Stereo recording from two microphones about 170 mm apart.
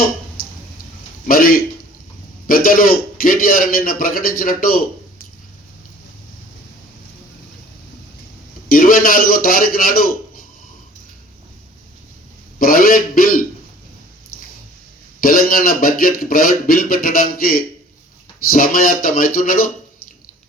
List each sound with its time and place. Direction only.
1.3 s speech: 55° left (ahead or behind)
8.7 s speech: 55° left (ahead or behind)
12.5 s speech: 55° left (ahead or behind)
15.2 s speech: 60° left (ahead or behind)